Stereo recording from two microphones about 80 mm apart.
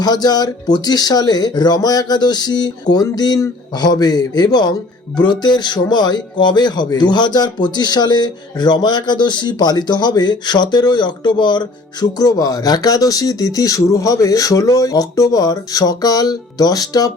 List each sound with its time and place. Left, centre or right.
0.0 s speech: left